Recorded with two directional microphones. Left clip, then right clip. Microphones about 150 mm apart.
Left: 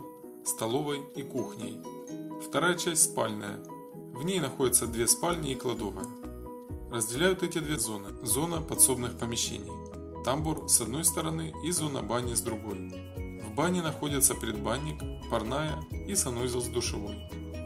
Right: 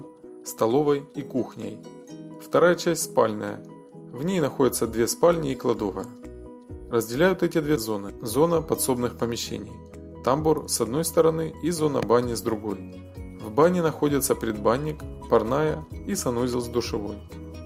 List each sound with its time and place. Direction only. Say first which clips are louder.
0.4 s speech: right 10 dB; 20° right (ahead or behind)
13.6 s speech: right 10 dB; 20° right (ahead or behind)